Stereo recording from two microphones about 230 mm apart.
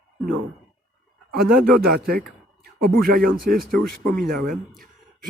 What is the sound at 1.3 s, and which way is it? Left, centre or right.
A man's voice, right.